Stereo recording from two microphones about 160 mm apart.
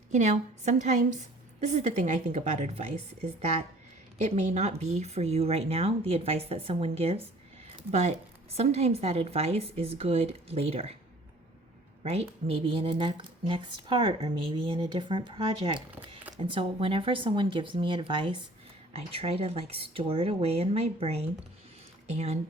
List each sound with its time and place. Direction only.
0.1 s a woman's voice: 45° right (ahead or behind)
12.0 s a woman's voice: 40° right (ahead or behind)